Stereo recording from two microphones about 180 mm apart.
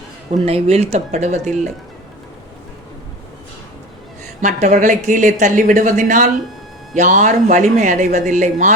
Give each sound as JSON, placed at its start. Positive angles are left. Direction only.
{"t": 0.4, "sound": "speech", "side_deg": -35}
{"t": 4.4, "sound": "speech", "side_deg": -45}